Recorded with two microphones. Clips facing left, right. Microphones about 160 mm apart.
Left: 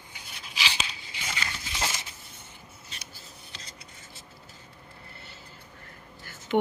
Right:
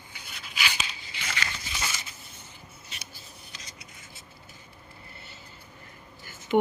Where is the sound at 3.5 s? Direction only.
30° left (ahead or behind).